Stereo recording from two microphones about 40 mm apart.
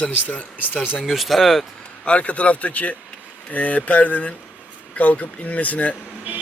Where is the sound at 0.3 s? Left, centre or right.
Left.